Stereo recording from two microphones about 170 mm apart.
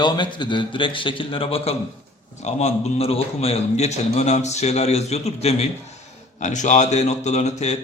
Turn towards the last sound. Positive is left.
turn(degrees=40)  # may be behind; listen again after turning